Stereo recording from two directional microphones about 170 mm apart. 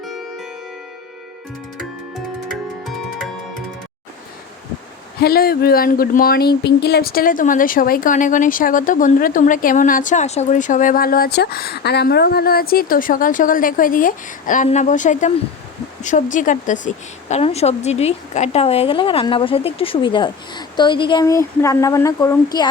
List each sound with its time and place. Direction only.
2.5 s music: centre (ahead or behind)
5.2 s a woman's voice: 65° left (ahead or behind); by 22.7 s 20° left (ahead or behind)